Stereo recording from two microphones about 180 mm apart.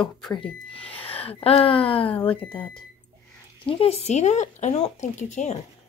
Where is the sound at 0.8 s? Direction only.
30° left (ahead or behind).